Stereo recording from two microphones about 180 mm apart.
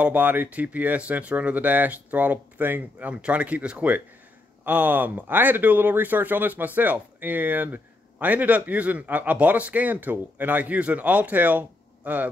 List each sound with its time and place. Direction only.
0.0 s speech: 10° right (ahead or behind)